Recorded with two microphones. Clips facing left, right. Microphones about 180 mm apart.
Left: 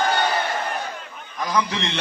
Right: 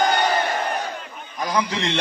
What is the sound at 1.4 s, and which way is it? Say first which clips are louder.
Speech: even; 15° right (ahead or behind).